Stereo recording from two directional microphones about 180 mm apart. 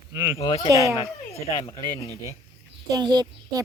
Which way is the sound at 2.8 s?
20° right (ahead or behind).